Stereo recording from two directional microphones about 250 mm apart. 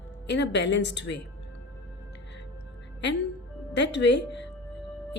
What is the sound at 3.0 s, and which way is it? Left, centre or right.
A woman's voice, left.